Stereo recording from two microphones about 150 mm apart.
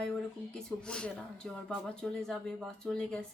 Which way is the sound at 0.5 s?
5° left (ahead or behind).